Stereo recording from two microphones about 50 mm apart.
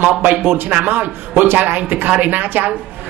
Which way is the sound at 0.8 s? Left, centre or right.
Right.